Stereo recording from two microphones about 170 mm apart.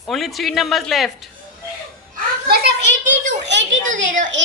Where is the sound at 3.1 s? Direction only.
45° right (ahead or behind).